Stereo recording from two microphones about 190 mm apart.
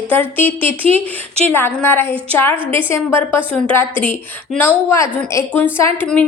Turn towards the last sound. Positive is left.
turn(degrees=10)  # may be behind; listen again after turning